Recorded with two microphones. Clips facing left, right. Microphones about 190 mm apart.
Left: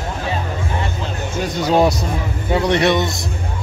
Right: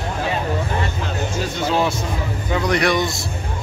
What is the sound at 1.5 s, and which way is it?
Speech, 40° left (ahead or behind).